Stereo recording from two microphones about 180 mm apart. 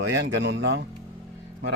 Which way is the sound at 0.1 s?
85° right.